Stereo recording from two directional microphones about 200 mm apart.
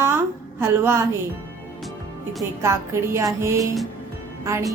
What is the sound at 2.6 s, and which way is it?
A woman's voice, 15° right (ahead or behind).